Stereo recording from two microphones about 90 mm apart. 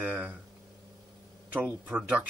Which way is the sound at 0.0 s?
20° right (ahead or behind).